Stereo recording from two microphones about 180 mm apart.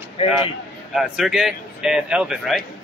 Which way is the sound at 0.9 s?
Centre (ahead or behind).